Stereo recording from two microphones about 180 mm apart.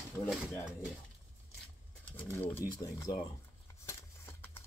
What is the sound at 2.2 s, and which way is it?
Speech, 10° left (ahead or behind).